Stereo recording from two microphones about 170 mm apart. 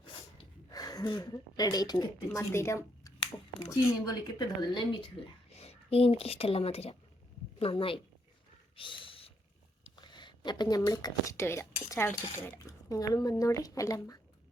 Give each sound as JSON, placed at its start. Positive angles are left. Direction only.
{"t": 0.0, "sound": "a sound", "side_deg": 25}
{"t": 3.7, "sound": "speech", "side_deg": 25}
{"t": 8.7, "sound": "gasp", "side_deg": 30}
{"t": 9.9, "sound": "speech", "side_deg": 25}